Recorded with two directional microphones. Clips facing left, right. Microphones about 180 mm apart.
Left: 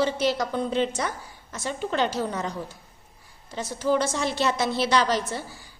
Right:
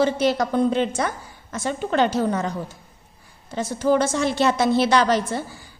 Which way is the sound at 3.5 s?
50° right (ahead or behind).